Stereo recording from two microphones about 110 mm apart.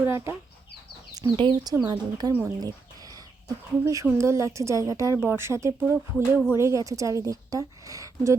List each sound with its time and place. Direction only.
0.0 s a woman's voice: 20° right (ahead or behind)
1.1 s a woman's voice: 40° right (ahead or behind)
2.4 s a sound: 35° right (ahead or behind)
4.0 s a woman's voice: 25° right (ahead or behind)